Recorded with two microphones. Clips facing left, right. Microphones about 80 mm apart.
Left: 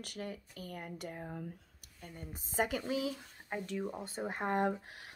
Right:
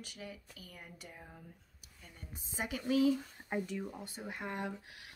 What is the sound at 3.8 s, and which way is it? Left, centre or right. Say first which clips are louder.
Speech: left 5 dB; left.